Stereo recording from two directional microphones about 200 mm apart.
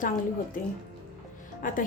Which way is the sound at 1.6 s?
40° left (ahead or behind).